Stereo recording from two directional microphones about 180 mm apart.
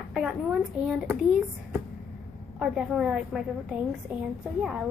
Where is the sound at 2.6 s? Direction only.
5° right (ahead or behind).